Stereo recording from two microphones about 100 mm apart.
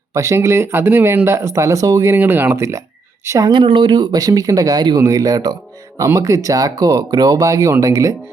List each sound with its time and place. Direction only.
0.1 s speech: 30° right (ahead or behind)
2.1 s speech: 20° right (ahead or behind)
3.5 s speech: 55° right (ahead or behind); by 8.1 s 35° right (ahead or behind)